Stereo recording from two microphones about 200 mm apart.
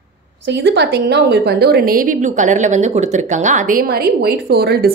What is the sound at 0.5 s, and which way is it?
A woman's voice, 60° right (ahead or behind).